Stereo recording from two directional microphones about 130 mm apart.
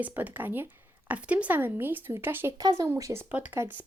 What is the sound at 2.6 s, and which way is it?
Speech, 30° right (ahead or behind).